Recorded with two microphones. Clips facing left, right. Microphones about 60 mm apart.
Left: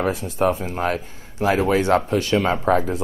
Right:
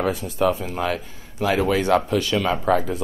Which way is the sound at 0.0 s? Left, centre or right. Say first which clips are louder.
Left 1 dB; left.